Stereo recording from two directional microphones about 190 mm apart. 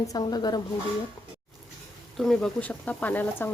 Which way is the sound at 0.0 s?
20° left (ahead or behind).